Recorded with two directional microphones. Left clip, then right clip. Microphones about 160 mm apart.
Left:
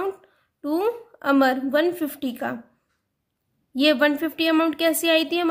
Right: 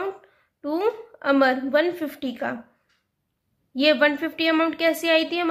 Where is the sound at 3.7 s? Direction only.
30° left (ahead or behind).